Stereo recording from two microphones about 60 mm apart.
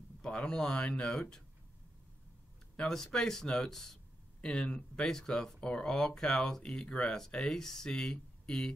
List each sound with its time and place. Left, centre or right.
0.2 s speech: centre
2.7 s speech: centre